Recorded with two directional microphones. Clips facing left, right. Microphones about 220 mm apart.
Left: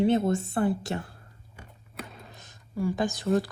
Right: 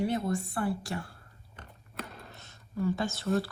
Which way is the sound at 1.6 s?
Centre (ahead or behind).